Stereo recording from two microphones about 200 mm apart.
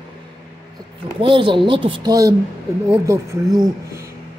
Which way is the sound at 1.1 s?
25° right (ahead or behind).